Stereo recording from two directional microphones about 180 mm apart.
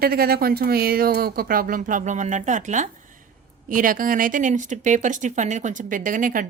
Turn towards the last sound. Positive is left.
turn(degrees=-50)  # may be behind; listen again after turning